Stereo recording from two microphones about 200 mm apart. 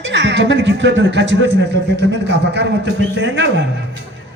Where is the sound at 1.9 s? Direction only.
60° right (ahead or behind).